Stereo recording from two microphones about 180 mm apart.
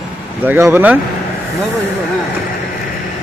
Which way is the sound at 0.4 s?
10° right (ahead or behind).